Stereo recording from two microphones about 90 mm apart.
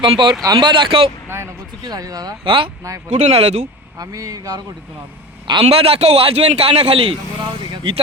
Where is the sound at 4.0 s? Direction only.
40° right (ahead or behind).